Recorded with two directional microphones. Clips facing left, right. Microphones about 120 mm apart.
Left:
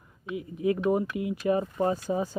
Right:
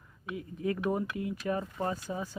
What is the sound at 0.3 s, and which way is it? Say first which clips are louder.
Speech: left 6 dB; 10° left (ahead or behind).